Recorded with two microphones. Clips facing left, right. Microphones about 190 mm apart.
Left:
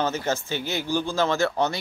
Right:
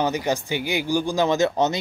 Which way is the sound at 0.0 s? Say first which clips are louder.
Right 3 dB; 15° right (ahead or behind).